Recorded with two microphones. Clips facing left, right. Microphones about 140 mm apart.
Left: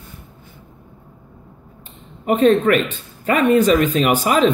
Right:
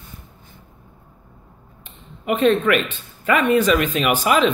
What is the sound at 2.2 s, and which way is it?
Speech, 40° left (ahead or behind).